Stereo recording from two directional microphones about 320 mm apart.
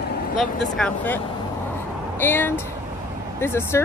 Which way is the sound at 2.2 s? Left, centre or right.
Centre.